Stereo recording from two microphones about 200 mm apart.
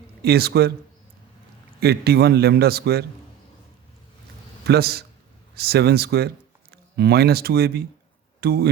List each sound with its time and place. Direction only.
0.2 s a man's voice: 50° right (ahead or behind)
1.8 s a man's voice: 55° right (ahead or behind)
4.6 s a man's voice: 55° right (ahead or behind)